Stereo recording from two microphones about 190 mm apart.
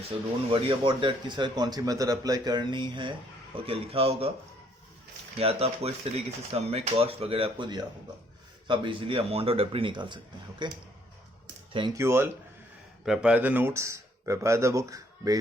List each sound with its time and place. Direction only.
0.5 s speech: 25° right (ahead or behind)
5.4 s speech: 30° right (ahead or behind)
11.9 s speech: 15° right (ahead or behind)